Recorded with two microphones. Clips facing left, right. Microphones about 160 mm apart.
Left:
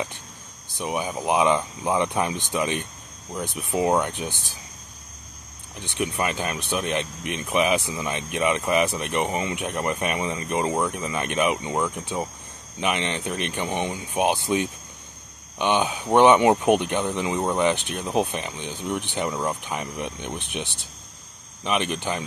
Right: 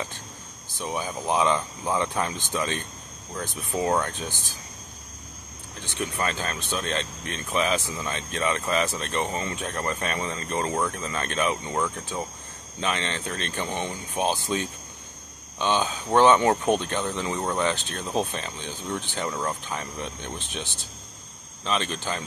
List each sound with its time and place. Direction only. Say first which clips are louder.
0.7 s speech: left 3 dB; 15° left (ahead or behind)
5.9 s speech: left 3 dB; 15° left (ahead or behind)
15.6 s speech: left 2 dB; 15° left (ahead or behind)